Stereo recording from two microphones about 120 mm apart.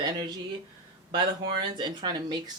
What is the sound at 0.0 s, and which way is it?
Speech, 40° right (ahead or behind).